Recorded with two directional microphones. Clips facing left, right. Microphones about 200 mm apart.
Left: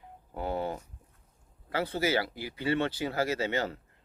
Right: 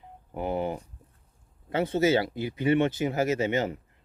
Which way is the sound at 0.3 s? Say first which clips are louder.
Right 3 dB; 15° right (ahead or behind).